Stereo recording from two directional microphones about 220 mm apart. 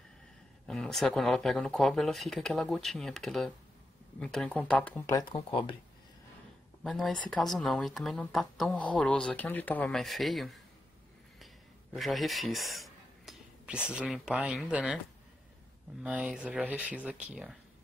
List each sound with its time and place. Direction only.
0.7 s speech: centre (ahead or behind)
5.3 s speech: 25° left (ahead or behind)
6.8 s speech: centre (ahead or behind)
11.9 s speech: centre (ahead or behind)
16.0 s speech: 5° right (ahead or behind)